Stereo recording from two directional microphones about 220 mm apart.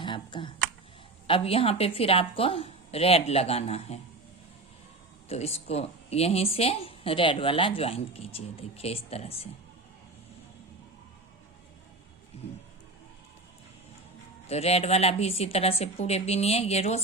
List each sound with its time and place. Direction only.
0.0 s computer keyboard: 20° left (ahead or behind)
1.3 s speech: 25° left (ahead or behind)
5.3 s speech: 30° left (ahead or behind)
14.4 s speech: 30° left (ahead or behind)